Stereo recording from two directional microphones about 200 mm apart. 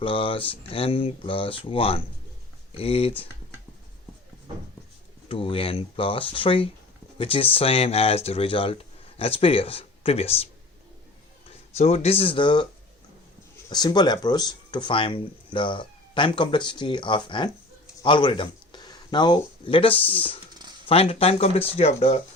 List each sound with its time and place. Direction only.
0.0 s speech: 25° left (ahead or behind)
5.3 s speech: 25° left (ahead or behind)
11.8 s speech: 30° left (ahead or behind)
13.7 s speech: 20° left (ahead or behind)